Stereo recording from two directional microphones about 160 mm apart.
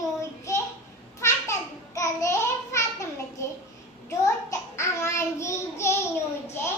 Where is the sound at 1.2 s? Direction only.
20° left (ahead or behind).